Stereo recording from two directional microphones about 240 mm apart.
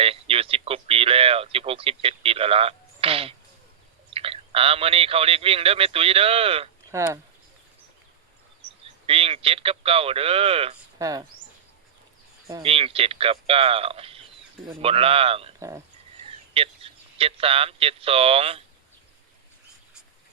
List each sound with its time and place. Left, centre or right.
0.0 s speech: right
6.9 s speech: centre
9.0 s speech: right
12.6 s speech: right
16.6 s speech: right